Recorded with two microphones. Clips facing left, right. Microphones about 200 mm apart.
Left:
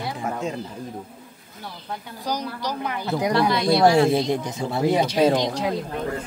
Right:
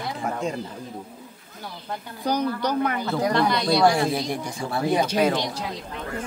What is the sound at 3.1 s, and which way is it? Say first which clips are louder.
Speech: left 1 dB; 20° left (ahead or behind).